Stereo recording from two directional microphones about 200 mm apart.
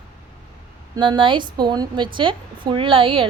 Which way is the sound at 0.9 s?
20° right (ahead or behind).